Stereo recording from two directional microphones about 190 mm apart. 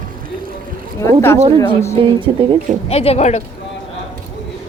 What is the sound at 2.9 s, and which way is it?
Speech, 30° left (ahead or behind).